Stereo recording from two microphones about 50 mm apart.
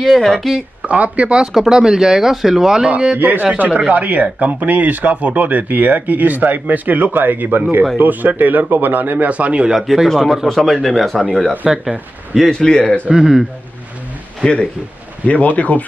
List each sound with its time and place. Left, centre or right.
0.0 s speech: centre
0.8 s speech: right
1.5 s speech: centre
3.2 s speech: right
9.3 s speech: right
9.7 s speech: centre
12.4 s a man's voice: centre
13.1 s speech: centre
14.4 s a man's voice: centre